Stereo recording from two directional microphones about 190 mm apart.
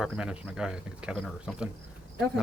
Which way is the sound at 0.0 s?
5° right (ahead or behind).